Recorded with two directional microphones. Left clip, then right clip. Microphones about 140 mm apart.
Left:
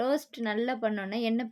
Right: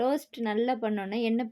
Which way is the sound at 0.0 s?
25° right (ahead or behind).